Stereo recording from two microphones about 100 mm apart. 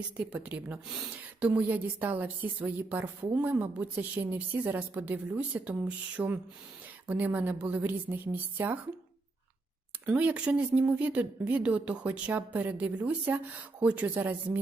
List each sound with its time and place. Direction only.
0.2 s a woman's voice: 15° right (ahead or behind)
1.5 s a woman's voice: 15° right (ahead or behind)
10.1 s a woman's voice: 15° right (ahead or behind)